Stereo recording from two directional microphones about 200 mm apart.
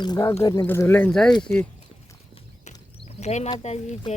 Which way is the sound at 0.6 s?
10° left (ahead or behind).